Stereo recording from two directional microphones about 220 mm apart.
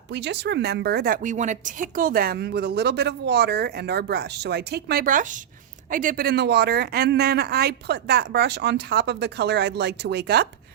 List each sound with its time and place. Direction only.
0.1 s a woman's voice: 50° right (ahead or behind)